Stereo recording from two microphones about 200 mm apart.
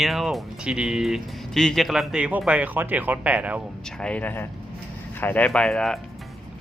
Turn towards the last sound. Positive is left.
turn(degrees=5)  # may be behind; listen again after turning